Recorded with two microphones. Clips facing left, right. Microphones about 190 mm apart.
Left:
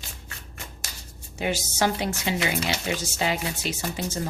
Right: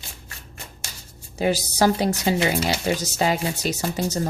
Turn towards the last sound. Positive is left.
turn(degrees=-35)  # may be behind; listen again after turning